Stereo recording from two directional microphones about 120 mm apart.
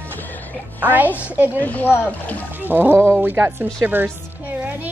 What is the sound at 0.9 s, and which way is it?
Speech, 15° right (ahead or behind).